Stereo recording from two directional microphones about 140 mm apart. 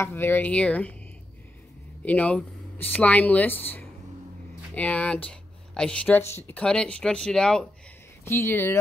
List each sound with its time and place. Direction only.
0.0 s speech: 15° left (ahead or behind)
2.0 s speech: 10° left (ahead or behind)
8.3 s speech: 15° left (ahead or behind)